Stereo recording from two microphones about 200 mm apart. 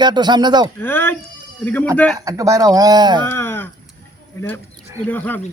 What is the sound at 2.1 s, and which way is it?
Speech, 15° right (ahead or behind).